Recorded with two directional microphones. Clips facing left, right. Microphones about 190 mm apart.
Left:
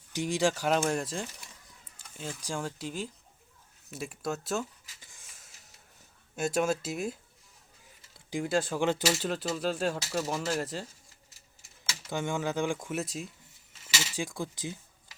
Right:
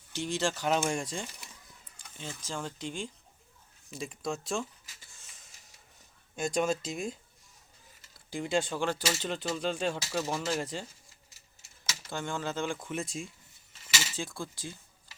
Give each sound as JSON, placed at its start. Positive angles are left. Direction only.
{"t": 0.1, "sound": "speech", "side_deg": 15}
{"t": 5.2, "sound": "a sound", "side_deg": 10}
{"t": 6.3, "sound": "speech", "side_deg": 5}
{"t": 8.3, "sound": "speech", "side_deg": 5}
{"t": 8.8, "sound": "speech", "side_deg": 20}
{"t": 9.2, "sound": "speech", "side_deg": 5}
{"t": 12.1, "sound": "speech", "side_deg": 15}
{"t": 14.2, "sound": "speech", "side_deg": 15}